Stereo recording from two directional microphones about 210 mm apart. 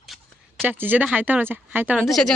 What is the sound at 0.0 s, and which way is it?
Speech, centre (ahead or behind).